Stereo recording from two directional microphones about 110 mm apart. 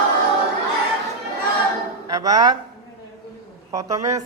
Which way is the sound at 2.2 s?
35° right (ahead or behind).